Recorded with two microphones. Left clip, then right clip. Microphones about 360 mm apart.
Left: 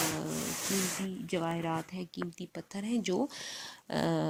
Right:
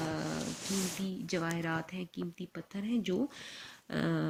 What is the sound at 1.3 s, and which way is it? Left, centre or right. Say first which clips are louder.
Speech: left 2 dB; centre.